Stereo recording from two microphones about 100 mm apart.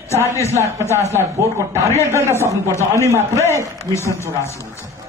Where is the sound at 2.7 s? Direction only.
30° left (ahead or behind).